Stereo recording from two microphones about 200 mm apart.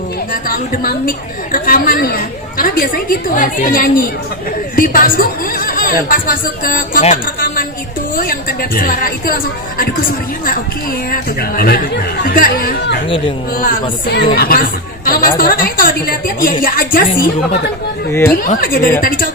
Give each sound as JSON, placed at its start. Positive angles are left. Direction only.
{"t": 0.4, "sound": "a woman's voice", "side_deg": 45}
{"t": 11.1, "sound": "a woman's voice", "side_deg": 50}
{"t": 14.3, "sound": "a woman's voice", "side_deg": 50}
{"t": 18.1, "sound": "speech", "side_deg": 10}
{"t": 18.4, "sound": "a woman's voice", "side_deg": 45}